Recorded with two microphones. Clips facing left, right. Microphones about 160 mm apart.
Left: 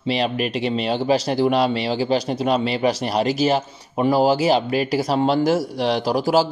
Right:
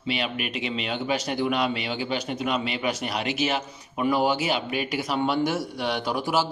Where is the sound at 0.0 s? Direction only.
35° left (ahead or behind).